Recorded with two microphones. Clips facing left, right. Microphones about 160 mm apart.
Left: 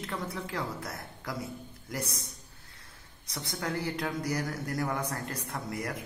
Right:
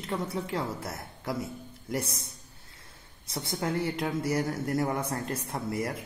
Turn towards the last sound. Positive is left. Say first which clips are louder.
# right 4 dB
turn(degrees=-25)  # may be behind; listen again after turning